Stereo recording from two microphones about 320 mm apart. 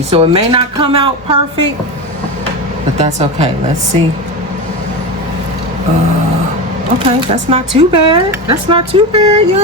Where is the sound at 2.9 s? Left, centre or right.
Centre.